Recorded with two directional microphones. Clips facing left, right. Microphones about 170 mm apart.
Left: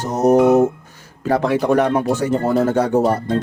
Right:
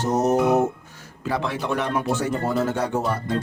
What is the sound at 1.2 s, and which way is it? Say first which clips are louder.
Speech: left 9 dB; 45° left (ahead or behind).